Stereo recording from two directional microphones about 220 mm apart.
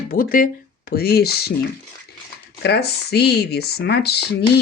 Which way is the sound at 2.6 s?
50° left (ahead or behind).